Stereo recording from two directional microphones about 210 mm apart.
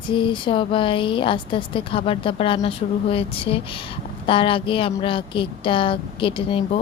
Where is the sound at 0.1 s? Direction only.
25° left (ahead or behind).